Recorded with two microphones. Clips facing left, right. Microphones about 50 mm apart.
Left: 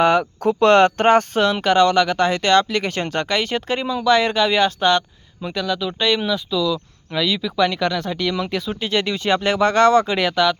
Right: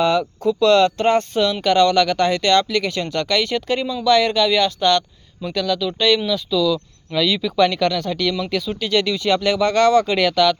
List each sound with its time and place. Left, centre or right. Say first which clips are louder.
0.0 s speech: left 2 dB; left
1.6 s speech: right 1 dB; left
3.2 s speech: right 1 dB; left
10.1 s speech: right 2 dB; centre